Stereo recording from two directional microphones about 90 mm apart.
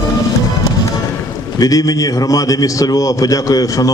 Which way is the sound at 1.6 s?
40° left (ahead or behind).